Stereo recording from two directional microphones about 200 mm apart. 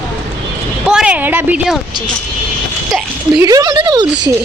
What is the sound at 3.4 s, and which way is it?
Speech, 20° right (ahead or behind).